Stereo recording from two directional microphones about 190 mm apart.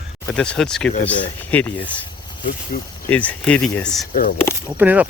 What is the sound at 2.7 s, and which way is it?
Speech, 45° left (ahead or behind).